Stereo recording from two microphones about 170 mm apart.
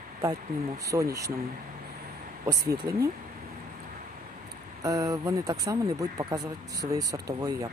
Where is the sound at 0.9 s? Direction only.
20° right (ahead or behind).